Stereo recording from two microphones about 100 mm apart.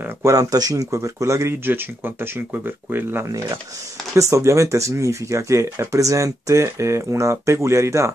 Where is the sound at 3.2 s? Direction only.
35° right (ahead or behind).